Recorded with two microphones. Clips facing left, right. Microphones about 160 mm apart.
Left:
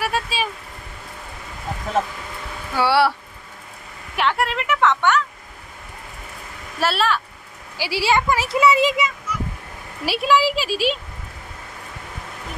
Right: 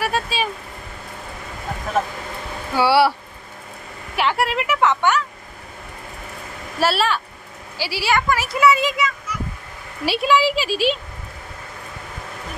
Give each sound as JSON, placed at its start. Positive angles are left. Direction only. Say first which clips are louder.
{"t": 0.0, "sound": "vehicle", "louder": "right 1 dB", "side_deg": 5}
{"t": 2.7, "sound": "speech", "louder": "right 2 dB", "side_deg": -5}
{"t": 4.2, "sound": "a woman's voice", "louder": "right 1 dB", "side_deg": -5}
{"t": 6.8, "sound": "a woman's voice", "louder": "right 1 dB", "side_deg": 0}
{"t": 7.7, "sound": "speech", "louder": "left 1 dB", "side_deg": 20}
{"t": 10.0, "sound": "a woman's voice", "louder": "right 1 dB", "side_deg": 0}